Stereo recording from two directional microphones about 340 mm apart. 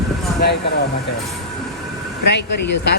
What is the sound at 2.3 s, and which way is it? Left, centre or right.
Speech, left.